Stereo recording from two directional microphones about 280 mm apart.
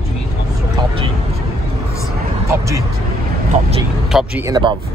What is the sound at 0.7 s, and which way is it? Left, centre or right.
Vehicle, centre.